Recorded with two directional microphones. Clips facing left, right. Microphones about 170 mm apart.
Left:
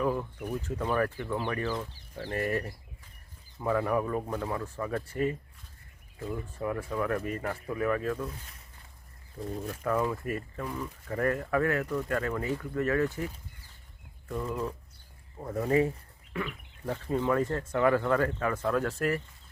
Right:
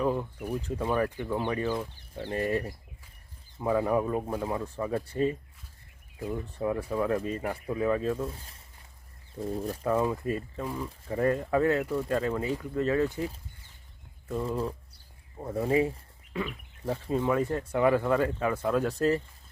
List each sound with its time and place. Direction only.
0.0 s a sound: 20° right (ahead or behind)
0.3 s speech: 10° right (ahead or behind); by 8.6 s 30° right (ahead or behind)
9.8 s speech: 20° right (ahead or behind)
14.3 s speech: 30° right (ahead or behind)
15.4 s speech: 15° right (ahead or behind)
16.5 s speech: 5° right (ahead or behind)
17.1 s speech: 20° right (ahead or behind)